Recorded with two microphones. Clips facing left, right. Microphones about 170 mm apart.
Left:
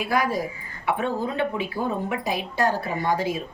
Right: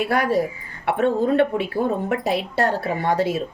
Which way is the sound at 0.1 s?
65° right (ahead or behind).